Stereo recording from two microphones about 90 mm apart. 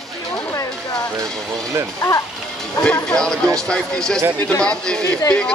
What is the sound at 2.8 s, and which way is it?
A man's voice, 10° left (ahead or behind).